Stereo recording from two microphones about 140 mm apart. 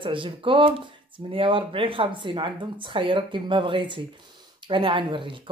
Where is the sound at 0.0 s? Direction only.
35° right (ahead or behind).